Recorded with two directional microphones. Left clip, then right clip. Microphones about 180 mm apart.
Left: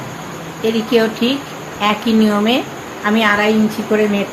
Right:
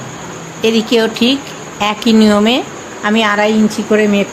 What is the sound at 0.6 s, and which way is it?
A woman's voice, 70° right (ahead or behind).